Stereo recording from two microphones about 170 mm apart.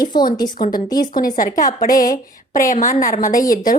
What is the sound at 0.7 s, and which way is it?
Speech, 25° left (ahead or behind).